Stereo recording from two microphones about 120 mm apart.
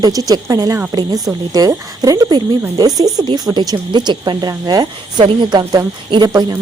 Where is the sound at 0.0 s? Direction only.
30° right (ahead or behind).